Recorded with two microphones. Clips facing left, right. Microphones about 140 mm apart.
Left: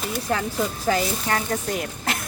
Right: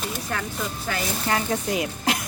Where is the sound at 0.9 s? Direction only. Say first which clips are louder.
Left 8 dB; 35° left (ahead or behind).